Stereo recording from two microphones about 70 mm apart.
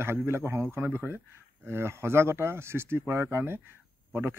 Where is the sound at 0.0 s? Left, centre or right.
Right.